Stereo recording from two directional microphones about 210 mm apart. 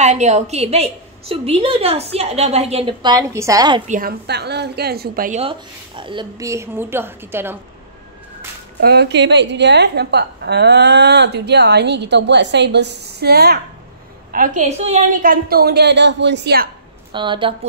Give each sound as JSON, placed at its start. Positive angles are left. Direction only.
{"t": 0.0, "sound": "a woman's voice", "side_deg": -35}
{"t": 3.8, "sound": "a woman's voice", "side_deg": -40}
{"t": 5.4, "sound": "a woman's voice", "side_deg": -25}
{"t": 8.8, "sound": "a woman's voice", "side_deg": -55}
{"t": 14.3, "sound": "a woman's voice", "side_deg": -40}
{"t": 15.4, "sound": "a woman's voice", "side_deg": -45}
{"t": 17.1, "sound": "a woman's voice", "side_deg": -20}